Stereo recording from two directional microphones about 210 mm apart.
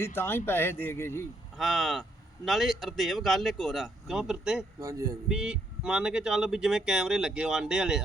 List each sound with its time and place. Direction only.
0.0 s speech: 10° left (ahead or behind)
1.5 s speech: centre (ahead or behind)
4.8 s speech: 15° right (ahead or behind)
5.3 s speech: 5° right (ahead or behind)